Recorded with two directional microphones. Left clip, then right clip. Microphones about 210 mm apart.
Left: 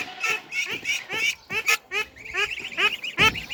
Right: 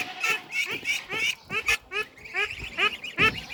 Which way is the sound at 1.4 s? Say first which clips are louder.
Left 3 dB; 20° left (ahead or behind).